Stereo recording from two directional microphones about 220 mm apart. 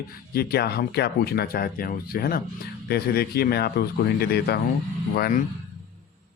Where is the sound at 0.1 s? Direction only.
45° left (ahead or behind).